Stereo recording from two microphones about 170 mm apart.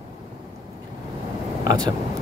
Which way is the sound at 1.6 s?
25° right (ahead or behind).